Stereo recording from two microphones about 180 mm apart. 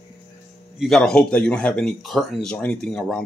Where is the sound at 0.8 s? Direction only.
Centre (ahead or behind).